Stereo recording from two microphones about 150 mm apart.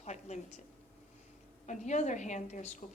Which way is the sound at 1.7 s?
55° left (ahead or behind).